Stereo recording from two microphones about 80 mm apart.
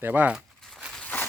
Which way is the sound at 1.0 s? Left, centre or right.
Left.